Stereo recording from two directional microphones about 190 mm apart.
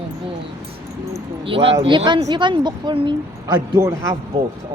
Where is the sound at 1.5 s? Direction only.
30° right (ahead or behind).